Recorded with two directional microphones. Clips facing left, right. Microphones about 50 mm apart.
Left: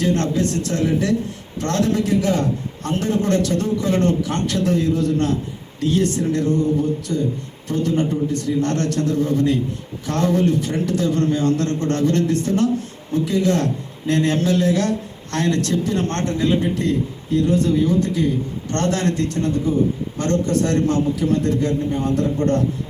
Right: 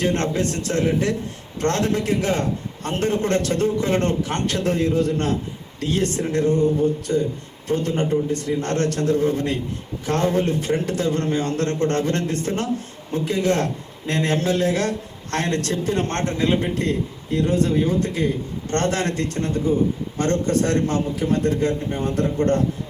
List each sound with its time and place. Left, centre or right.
0.0 s a man's voice: right